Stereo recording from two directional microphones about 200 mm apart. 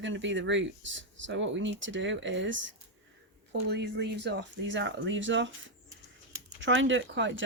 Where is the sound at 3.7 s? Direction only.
55° right (ahead or behind).